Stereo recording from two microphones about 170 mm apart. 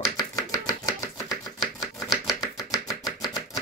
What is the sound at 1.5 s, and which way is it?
Chopping, centre (ahead or behind).